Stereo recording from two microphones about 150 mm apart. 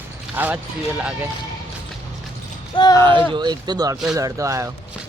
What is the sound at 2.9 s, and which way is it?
Speech, 30° right (ahead or behind).